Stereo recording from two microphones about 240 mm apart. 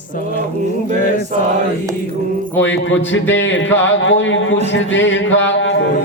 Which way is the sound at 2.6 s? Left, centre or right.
Left.